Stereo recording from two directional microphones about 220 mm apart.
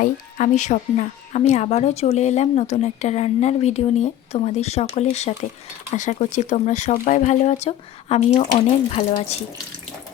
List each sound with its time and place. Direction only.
0.0 s a woman's voice: 35° left (ahead or behind)